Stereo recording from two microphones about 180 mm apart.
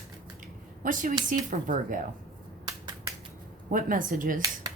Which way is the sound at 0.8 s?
45° right (ahead or behind).